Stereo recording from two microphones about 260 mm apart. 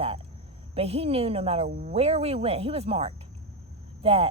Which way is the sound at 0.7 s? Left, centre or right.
Right.